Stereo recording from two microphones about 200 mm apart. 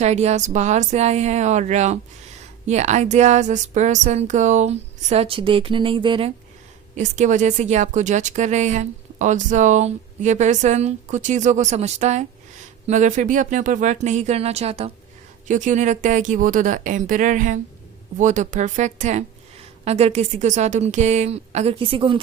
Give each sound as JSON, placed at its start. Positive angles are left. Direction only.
{"t": 0.0, "sound": "speech", "side_deg": -35}
{"t": 6.9, "sound": "speech", "side_deg": -35}